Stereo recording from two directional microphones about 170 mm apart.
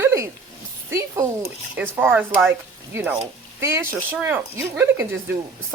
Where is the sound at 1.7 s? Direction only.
10° right (ahead or behind).